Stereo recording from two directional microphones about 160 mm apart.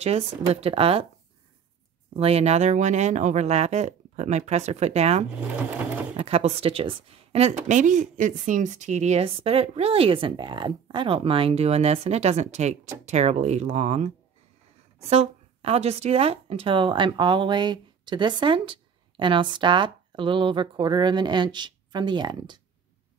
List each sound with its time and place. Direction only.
0.0 s a woman's voice: 40° right (ahead or behind)
2.1 s a woman's voice: 40° right (ahead or behind)